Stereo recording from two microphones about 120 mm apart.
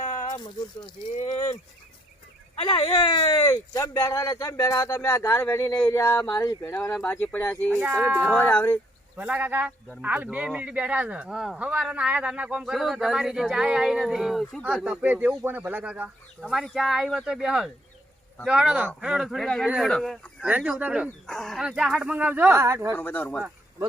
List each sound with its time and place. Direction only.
0.3 s speech: 35° left (ahead or behind)
1.1 s speech: 75° left (ahead or behind)
2.6 s speech: 50° left (ahead or behind)
3.2 s speech: 30° left (ahead or behind)
7.8 s speech: 15° right (ahead or behind)
8.4 s speech: 15° left (ahead or behind)
9.1 s speech: 15° right (ahead or behind)
14.8 s speech: 15° right (ahead or behind)
19.9 s speech: 5° left (ahead or behind)
20.5 s speech: 10° right (ahead or behind)
21.2 s speech: centre (ahead or behind); by 23.0 s 20° right (ahead or behind)
23.0 s speech: 15° left (ahead or behind)